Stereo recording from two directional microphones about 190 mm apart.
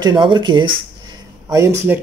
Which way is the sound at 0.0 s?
25° right (ahead or behind).